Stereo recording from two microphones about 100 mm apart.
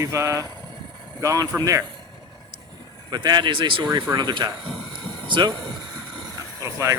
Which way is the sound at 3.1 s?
45° right (ahead or behind).